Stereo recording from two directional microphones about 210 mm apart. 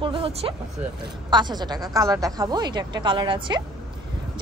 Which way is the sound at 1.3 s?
20° right (ahead or behind).